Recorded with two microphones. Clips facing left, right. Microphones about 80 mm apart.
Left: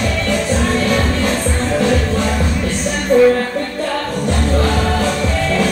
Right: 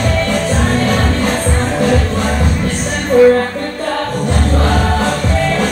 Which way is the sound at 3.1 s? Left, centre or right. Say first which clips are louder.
Right 3 dB; right.